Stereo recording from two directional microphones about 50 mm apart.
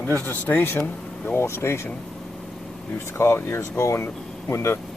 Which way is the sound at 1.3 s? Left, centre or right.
Left.